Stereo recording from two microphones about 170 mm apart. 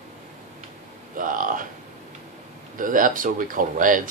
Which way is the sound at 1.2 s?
50° right (ahead or behind).